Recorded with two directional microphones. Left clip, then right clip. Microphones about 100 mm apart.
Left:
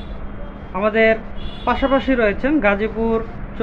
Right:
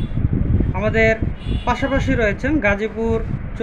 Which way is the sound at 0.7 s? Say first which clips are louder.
Left 2 dB; 20° right (ahead or behind).